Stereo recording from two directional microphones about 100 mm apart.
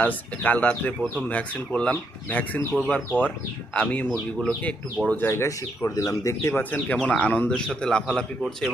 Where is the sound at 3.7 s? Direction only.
15° left (ahead or behind).